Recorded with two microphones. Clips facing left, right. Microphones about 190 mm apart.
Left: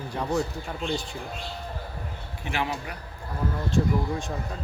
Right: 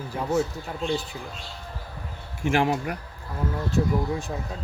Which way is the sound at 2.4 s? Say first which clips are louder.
Right 7 dB; 45° right (ahead or behind).